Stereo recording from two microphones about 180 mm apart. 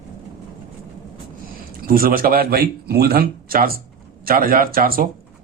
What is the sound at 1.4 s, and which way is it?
Speech, 55° right (ahead or behind).